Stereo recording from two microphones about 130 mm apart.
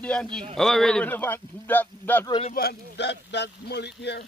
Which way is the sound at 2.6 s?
90° left.